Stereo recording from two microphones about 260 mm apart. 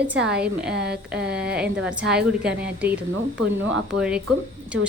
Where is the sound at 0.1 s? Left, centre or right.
Centre.